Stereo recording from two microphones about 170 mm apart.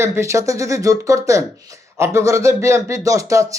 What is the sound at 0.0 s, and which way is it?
A man's voice, 15° right (ahead or behind).